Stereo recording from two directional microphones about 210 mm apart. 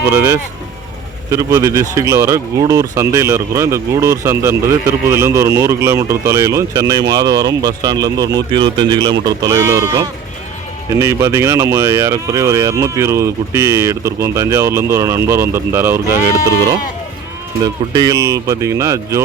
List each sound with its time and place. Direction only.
0.1 s speech: 10° right (ahead or behind)
17.6 s speech: 20° right (ahead or behind)